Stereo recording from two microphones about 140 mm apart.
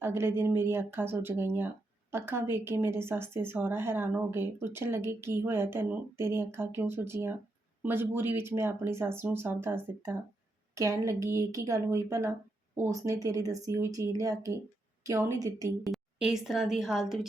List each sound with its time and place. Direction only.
0.0 s speech: 15° right (ahead or behind)
15.8 s a woman's voice: centre (ahead or behind)